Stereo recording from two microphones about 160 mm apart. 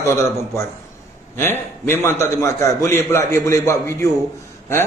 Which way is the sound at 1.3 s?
15° left (ahead or behind).